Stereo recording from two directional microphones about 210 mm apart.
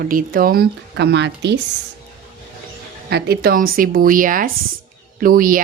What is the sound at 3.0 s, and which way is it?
Speech, 50° right (ahead or behind).